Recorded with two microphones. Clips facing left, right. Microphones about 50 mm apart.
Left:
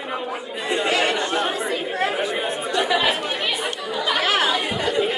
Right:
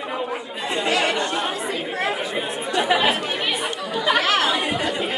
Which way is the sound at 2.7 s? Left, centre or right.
Right.